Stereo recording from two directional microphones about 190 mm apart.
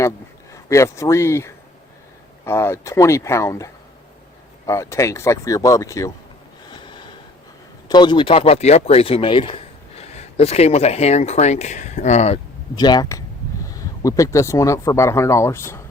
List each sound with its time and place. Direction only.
0.5 s speech: 15° left (ahead or behind)
6.7 s snort: 25° left (ahead or behind)
7.9 s speech: 25° left (ahead or behind)
12.7 s speech: 20° left (ahead or behind)